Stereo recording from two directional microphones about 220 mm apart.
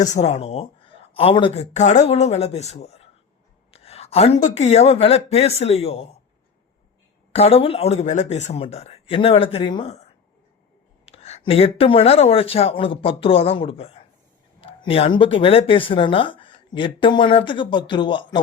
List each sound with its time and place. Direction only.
0.0 s speech: 30° left (ahead or behind)
7.3 s speech: 25° left (ahead or behind)
11.0 s speech: 30° left (ahead or behind)